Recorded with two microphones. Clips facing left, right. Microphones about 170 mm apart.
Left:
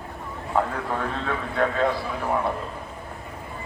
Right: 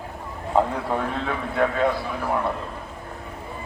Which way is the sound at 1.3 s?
5° right (ahead or behind).